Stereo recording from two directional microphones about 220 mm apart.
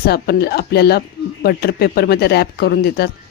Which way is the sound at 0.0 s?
45° left (ahead or behind).